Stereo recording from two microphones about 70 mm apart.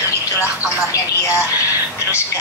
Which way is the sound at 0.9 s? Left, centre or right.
Left.